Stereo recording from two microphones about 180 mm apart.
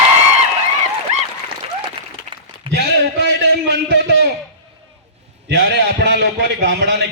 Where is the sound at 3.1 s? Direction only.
65° right (ahead or behind).